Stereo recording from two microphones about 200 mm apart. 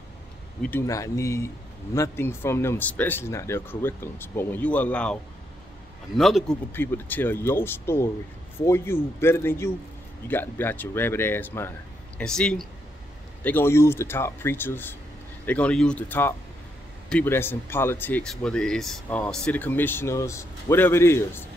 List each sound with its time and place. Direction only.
0.6 s speech: 10° left (ahead or behind)
6.7 s speech: 10° left (ahead or behind)